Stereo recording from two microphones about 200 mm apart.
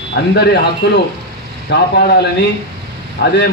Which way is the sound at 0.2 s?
55° left (ahead or behind).